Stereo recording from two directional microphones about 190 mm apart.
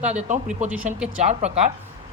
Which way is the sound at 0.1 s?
40° right (ahead or behind).